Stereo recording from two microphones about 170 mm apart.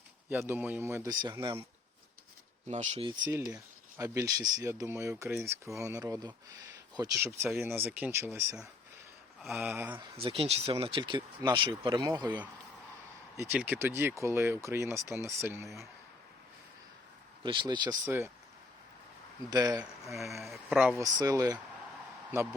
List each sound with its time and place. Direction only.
0.3 s speech: 10° right (ahead or behind)
1.1 s speech: 25° right (ahead or behind)
2.6 s speech: 40° right (ahead or behind)
3.1 s speech: 20° right (ahead or behind)
9.4 s speech: centre (ahead or behind)
9.6 s speech: 10° right (ahead or behind)
10.0 s speech: 35° right (ahead or behind); by 15.9 s 15° right (ahead or behind)
17.4 s speech: 30° right (ahead or behind)
18.0 s speech: 15° right (ahead or behind)
19.5 s speech: 20° right (ahead or behind)
20.2 s speech: centre (ahead or behind)
21.0 s speech: 20° right (ahead or behind)